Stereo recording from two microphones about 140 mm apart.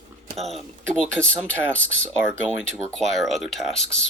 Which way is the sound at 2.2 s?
15° right (ahead or behind).